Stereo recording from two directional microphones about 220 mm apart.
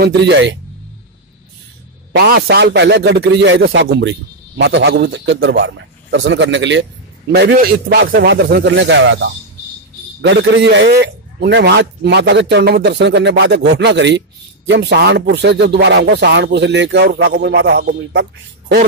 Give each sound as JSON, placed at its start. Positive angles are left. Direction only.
{"t": 0.0, "sound": "speech", "side_deg": -50}
{"t": 2.1, "sound": "speech", "side_deg": -45}